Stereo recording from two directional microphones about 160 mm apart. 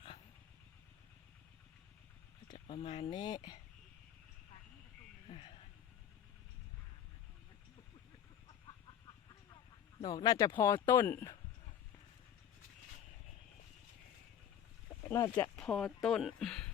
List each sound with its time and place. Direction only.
2.6 s speech: 35° left (ahead or behind)
3.1 s speech: 25° left (ahead or behind)
10.0 s speech: 25° left (ahead or behind)
15.1 s speech: 20° left (ahead or behind)
15.5 s speech: 5° left (ahead or behind)